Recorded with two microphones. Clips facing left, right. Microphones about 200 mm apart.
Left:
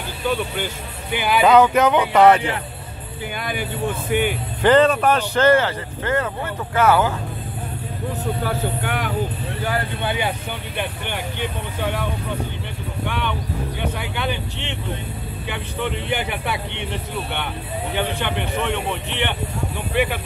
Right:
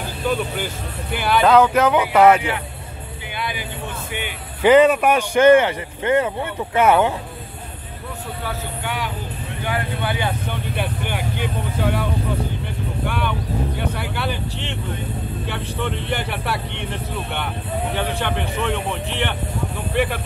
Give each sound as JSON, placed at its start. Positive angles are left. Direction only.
{"t": 1.1, "sound": "speech", "side_deg": 0}
{"t": 3.3, "sound": "speech", "side_deg": 50}
{"t": 4.6, "sound": "speech", "side_deg": -10}
{"t": 8.5, "sound": "speech", "side_deg": 50}
{"t": 10.0, "sound": "speech", "side_deg": 20}
{"t": 10.8, "sound": "speech", "side_deg": -5}